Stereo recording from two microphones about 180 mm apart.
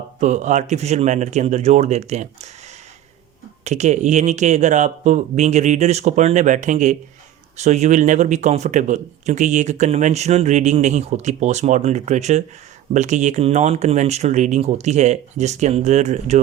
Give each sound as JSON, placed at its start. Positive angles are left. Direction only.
{"t": 0.2, "sound": "speech", "side_deg": -40}
{"t": 3.6, "sound": "speech", "side_deg": -40}